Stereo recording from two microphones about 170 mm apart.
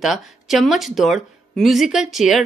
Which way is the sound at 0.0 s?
Centre (ahead or behind).